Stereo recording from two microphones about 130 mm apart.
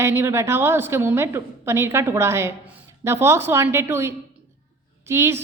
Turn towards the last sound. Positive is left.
turn(degrees=-20)  # may be behind; listen again after turning